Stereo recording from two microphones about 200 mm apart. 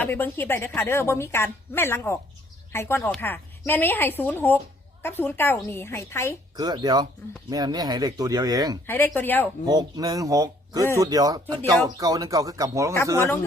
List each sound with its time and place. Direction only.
0.0 s a woman's voice: 10° left (ahead or behind)
6.6 s speech: 20° right (ahead or behind)
8.9 s a woman's voice: 10° left (ahead or behind)
9.6 s speech: 20° right (ahead or behind)